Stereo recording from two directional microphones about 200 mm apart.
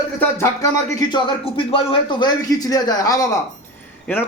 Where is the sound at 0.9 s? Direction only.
25° left (ahead or behind).